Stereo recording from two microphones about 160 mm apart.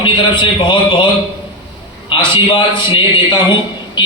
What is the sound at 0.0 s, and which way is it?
A man's voice, 30° left (ahead or behind).